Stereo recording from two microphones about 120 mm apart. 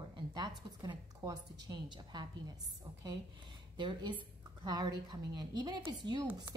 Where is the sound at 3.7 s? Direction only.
40° right (ahead or behind).